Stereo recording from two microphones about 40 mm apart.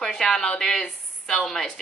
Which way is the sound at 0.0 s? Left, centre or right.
Centre.